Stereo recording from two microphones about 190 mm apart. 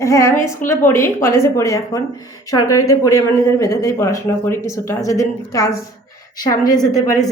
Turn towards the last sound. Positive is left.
turn(degrees=20)  # may be behind; listen again after turning